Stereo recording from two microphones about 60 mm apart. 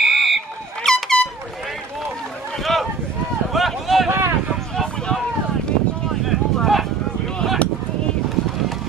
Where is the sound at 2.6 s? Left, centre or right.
Centre.